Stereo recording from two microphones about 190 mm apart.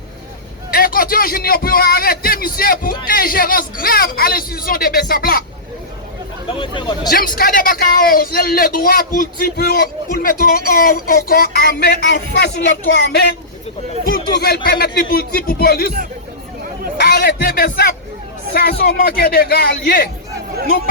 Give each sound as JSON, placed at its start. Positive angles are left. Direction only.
{"t": 0.7, "sound": "speech", "side_deg": 50}
{"t": 6.5, "sound": "speech", "side_deg": 25}
{"t": 7.1, "sound": "a man's voice", "side_deg": 50}
{"t": 14.4, "sound": "speech", "side_deg": 50}
{"t": 17.0, "sound": "a man's voice", "side_deg": 55}